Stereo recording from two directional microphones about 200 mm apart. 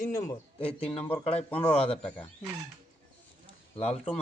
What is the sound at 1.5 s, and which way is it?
Speech, 5° left (ahead or behind).